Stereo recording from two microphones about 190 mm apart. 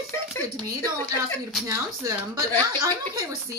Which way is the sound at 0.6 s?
20° right (ahead or behind).